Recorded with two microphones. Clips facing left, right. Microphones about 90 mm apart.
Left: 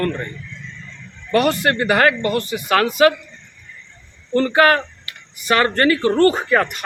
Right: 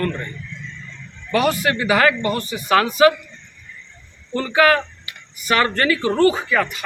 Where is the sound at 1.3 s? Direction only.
55° left (ahead or behind).